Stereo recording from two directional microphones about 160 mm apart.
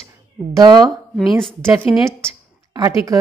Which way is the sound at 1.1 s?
Centre (ahead or behind).